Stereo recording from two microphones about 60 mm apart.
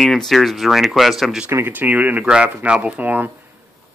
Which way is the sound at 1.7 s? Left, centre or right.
Right.